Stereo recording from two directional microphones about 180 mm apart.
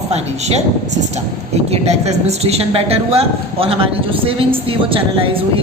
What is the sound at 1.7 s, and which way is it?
A woman's voice, 35° right (ahead or behind).